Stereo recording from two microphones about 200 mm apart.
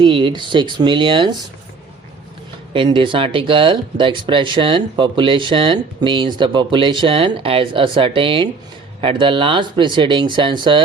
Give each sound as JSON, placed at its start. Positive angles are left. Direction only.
{"t": 0.0, "sound": "speech", "side_deg": -25}
{"t": 2.7, "sound": "speech", "side_deg": -25}